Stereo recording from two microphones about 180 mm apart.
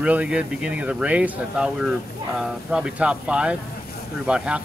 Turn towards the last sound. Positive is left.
turn(degrees=-5)  # may be behind; listen again after turning